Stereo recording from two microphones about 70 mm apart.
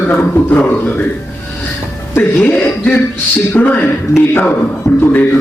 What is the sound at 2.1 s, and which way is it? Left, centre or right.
A man's voice, left.